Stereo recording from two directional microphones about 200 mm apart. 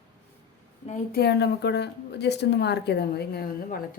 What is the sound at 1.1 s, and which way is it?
Speech, 55° left (ahead or behind).